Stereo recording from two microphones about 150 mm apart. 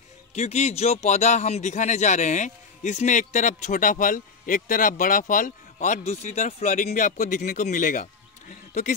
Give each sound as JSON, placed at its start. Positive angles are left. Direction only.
{"t": 0.3, "sound": "speech", "side_deg": 45}